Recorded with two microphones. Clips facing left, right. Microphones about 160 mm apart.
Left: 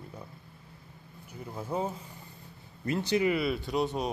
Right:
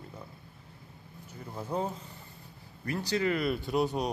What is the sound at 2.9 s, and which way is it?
Speech, 20° left (ahead or behind).